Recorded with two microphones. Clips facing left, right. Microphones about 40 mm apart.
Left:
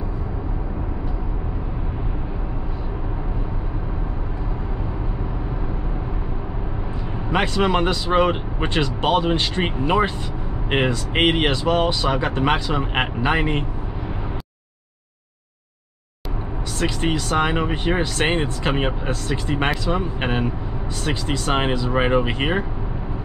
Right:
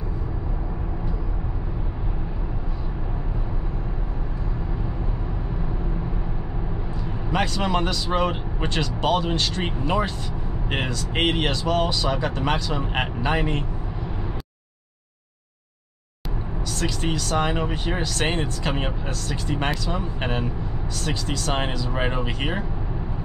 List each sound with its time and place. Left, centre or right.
7.2 s speech: left
16.7 s speech: left